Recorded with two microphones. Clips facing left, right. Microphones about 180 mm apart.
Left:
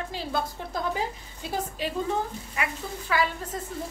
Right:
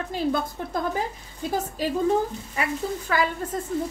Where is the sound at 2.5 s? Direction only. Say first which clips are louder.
Right 7 dB; 40° right (ahead or behind).